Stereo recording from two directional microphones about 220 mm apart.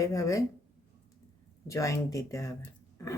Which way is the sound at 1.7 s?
15° left (ahead or behind).